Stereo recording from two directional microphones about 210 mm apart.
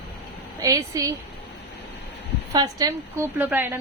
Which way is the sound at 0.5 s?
15° right (ahead or behind).